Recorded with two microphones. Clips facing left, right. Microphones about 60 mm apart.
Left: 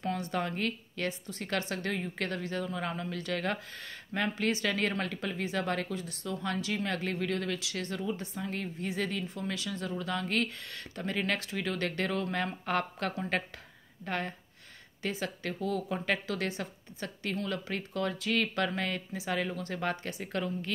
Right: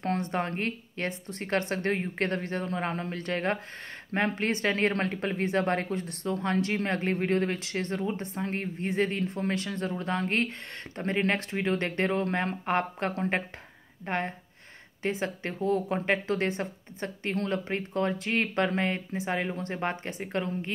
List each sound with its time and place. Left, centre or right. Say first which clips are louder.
0.0 s speech: right 3 dB; right